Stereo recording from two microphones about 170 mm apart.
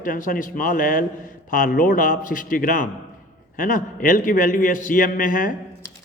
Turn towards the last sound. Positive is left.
turn(degrees=55)  # may be behind; listen again after turning